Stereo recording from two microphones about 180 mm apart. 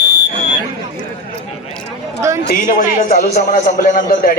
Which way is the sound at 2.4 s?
45° left (ahead or behind).